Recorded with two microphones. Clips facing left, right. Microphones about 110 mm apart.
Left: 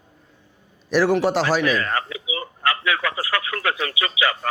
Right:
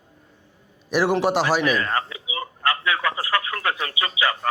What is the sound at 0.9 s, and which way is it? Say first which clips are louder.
A man's voice: left 2 dB; 15° right (ahead or behind).